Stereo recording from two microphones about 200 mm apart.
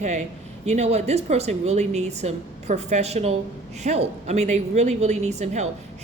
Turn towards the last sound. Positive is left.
turn(degrees=-35)  # may be behind; listen again after turning